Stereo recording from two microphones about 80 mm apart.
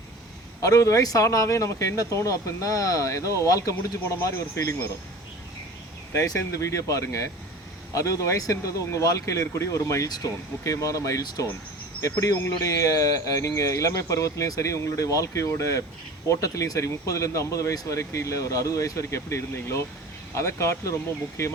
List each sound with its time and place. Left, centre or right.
0.6 s speech: left
6.2 s speech: left
10.1 s speech: left
10.6 s speech: left